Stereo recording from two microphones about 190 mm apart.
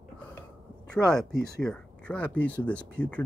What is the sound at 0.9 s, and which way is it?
Speech, 5° left (ahead or behind).